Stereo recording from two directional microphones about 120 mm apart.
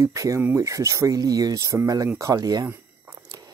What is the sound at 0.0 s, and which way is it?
Speech, 30° right (ahead or behind).